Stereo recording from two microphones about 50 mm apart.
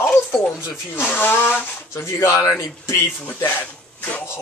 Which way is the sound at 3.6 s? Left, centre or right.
Left.